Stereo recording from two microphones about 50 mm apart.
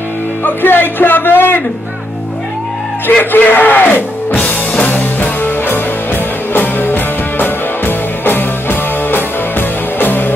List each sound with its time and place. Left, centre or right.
0.4 s music: left
3.1 s music: left
4.4 s music: left